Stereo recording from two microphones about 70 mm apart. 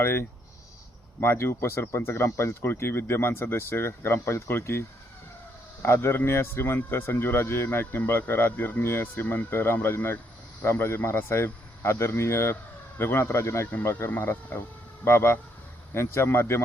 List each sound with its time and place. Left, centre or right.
0.0 s speech: left
13.8 s speech: left